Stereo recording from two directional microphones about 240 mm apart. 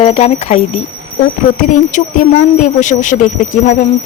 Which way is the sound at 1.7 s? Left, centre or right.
Left.